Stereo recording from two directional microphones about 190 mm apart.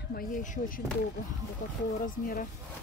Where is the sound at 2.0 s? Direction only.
45° left (ahead or behind).